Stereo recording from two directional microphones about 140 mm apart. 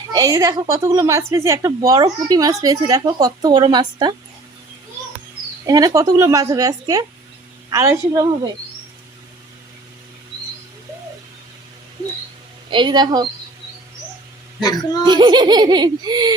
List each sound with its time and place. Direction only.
0.1 s speech: 25° right (ahead or behind)
5.6 s speech: 25° right (ahead or behind)
12.7 s speech: 30° right (ahead or behind)
14.6 s speech: 30° left (ahead or behind)
15.0 s speech: 30° right (ahead or behind)